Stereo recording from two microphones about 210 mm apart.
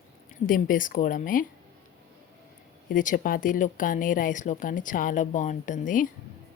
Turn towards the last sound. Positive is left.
turn(degrees=40)  # may be behind; listen again after turning